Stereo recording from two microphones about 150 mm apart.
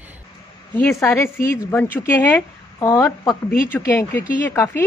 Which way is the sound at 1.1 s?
15° left (ahead or behind).